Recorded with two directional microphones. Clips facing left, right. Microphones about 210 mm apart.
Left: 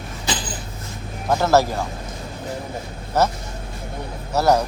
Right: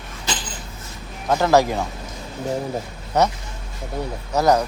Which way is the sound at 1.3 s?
5° left (ahead or behind).